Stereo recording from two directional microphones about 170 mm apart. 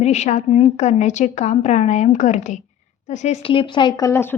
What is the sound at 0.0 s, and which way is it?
A woman's voice, 40° left (ahead or behind).